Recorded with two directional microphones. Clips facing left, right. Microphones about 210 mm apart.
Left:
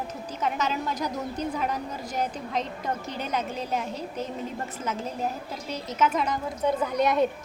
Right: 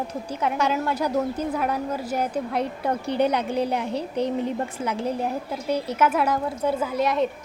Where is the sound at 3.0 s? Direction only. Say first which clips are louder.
Right 8 dB; 65° right (ahead or behind).